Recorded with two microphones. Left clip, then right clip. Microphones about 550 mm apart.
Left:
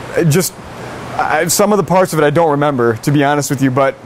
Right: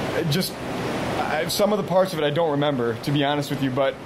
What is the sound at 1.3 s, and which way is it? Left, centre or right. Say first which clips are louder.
Speech: left 10 dB; left.